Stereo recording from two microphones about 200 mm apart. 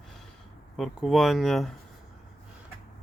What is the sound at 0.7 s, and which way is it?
Speech, centre (ahead or behind).